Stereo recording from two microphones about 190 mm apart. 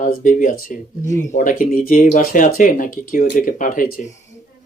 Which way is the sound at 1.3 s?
45° left (ahead or behind).